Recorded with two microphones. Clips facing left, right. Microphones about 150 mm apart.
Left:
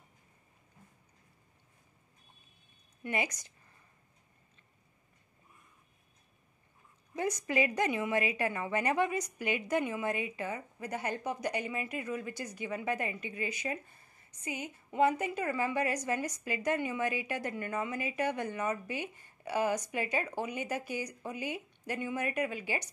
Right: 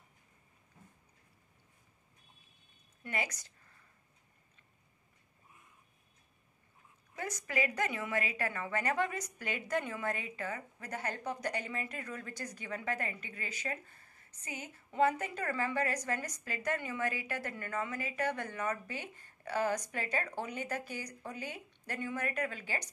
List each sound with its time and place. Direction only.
3.0 s a woman's voice: 20° left (ahead or behind)
7.2 s a woman's voice: 20° left (ahead or behind)